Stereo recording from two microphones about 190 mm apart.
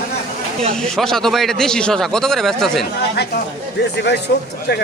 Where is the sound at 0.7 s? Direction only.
5° left (ahead or behind).